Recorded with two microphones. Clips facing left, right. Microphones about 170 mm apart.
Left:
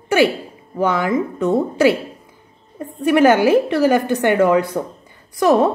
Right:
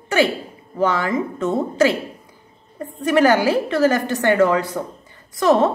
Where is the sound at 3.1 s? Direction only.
20° left (ahead or behind).